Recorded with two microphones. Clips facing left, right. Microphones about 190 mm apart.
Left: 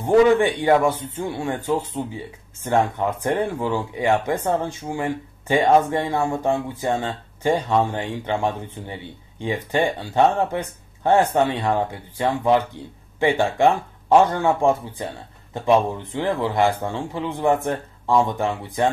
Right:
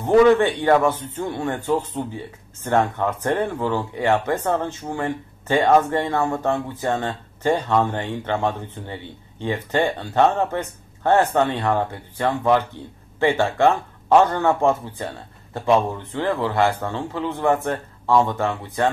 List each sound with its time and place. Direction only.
0.0 s a man's voice: 10° left (ahead or behind)